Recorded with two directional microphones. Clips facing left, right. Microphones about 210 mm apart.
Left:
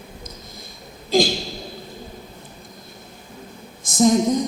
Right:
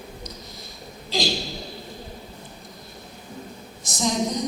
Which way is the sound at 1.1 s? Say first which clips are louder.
Left 8 dB; 50° left (ahead or behind).